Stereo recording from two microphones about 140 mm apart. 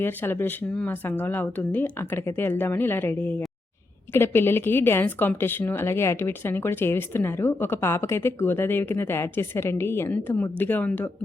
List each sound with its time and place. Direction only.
0.0 s speech: 15° left (ahead or behind)